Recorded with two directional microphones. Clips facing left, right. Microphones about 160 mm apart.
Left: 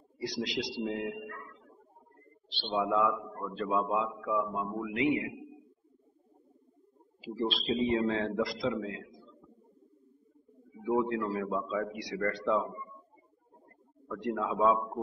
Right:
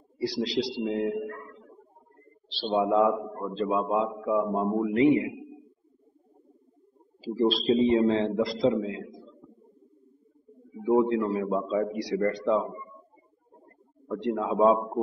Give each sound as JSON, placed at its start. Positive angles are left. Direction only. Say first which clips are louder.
{"t": 0.2, "sound": "a man's voice", "louder": "right 7 dB", "side_deg": -30}
{"t": 1.1, "sound": "a sound", "louder": "right 10 dB", "side_deg": -35}
{"t": 2.7, "sound": "a man's voice", "louder": "right 6 dB", "side_deg": -30}
{"t": 7.2, "sound": "a man's voice", "louder": "right 8 dB", "side_deg": -35}
{"t": 10.8, "sound": "a man's voice", "louder": "right 7 dB", "side_deg": -30}
{"t": 12.3, "sound": "a man's voice", "louder": "right 1 dB", "side_deg": -20}
{"t": 14.0, "sound": "a man's voice", "louder": "right 5 dB", "side_deg": -30}